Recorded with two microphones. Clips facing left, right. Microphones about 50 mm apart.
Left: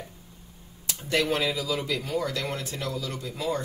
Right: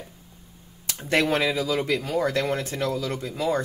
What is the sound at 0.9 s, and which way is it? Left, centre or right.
Speech, right.